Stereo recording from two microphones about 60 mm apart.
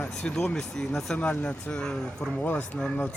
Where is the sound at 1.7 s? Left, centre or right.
Centre.